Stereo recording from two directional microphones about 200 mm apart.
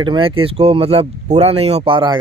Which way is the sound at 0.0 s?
25° right (ahead or behind).